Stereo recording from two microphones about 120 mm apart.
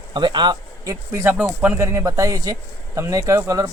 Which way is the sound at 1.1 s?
20° right (ahead or behind).